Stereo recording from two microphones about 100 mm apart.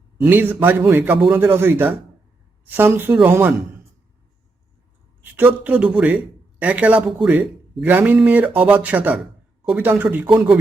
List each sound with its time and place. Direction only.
0.2 s a man's voice: 20° right (ahead or behind)
5.2 s speech: 15° right (ahead or behind)